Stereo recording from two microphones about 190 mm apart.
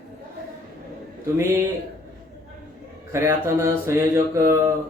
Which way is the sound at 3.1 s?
15° right (ahead or behind).